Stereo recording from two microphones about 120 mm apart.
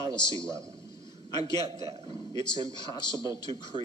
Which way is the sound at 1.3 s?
35° left (ahead or behind).